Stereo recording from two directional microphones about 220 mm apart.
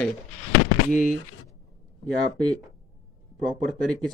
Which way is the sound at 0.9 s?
35° left (ahead or behind).